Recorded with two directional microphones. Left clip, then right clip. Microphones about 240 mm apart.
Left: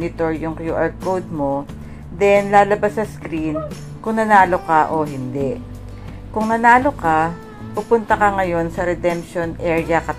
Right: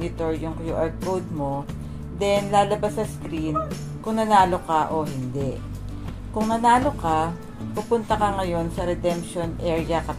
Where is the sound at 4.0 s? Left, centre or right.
Centre.